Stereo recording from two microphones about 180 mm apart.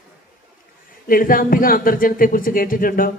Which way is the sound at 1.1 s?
50° left (ahead or behind).